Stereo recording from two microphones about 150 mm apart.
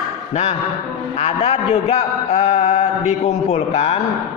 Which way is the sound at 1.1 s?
40° left (ahead or behind).